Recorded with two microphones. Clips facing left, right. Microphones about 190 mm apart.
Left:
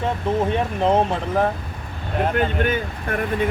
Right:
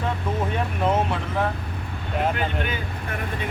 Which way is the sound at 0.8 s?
30° left (ahead or behind).